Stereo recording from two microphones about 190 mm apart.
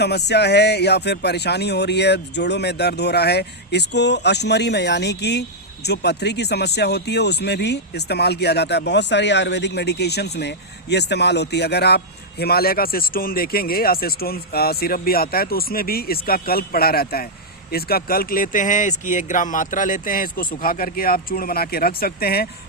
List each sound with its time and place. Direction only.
0.0 s speech: 60° left (ahead or behind)